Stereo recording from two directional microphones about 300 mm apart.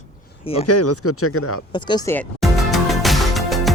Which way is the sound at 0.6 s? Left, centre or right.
Left.